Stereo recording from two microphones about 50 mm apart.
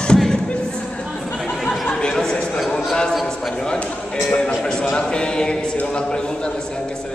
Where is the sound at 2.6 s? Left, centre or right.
Centre.